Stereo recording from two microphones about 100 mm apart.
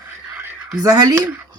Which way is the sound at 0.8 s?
35° right (ahead or behind).